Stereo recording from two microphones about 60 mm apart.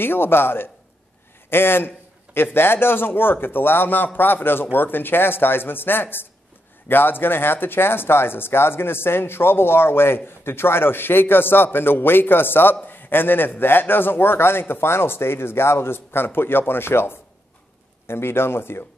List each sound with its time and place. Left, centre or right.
0.0 s speech: left